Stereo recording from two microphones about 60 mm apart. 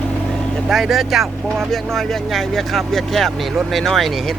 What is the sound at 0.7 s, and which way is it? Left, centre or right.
Speech, centre.